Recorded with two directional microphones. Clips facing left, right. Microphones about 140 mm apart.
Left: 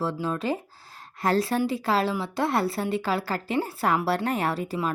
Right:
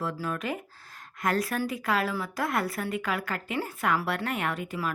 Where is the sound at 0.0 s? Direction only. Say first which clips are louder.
Left 4 dB; 30° left (ahead or behind).